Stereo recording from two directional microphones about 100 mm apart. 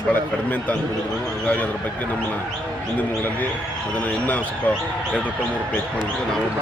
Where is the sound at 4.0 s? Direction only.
15° left (ahead or behind).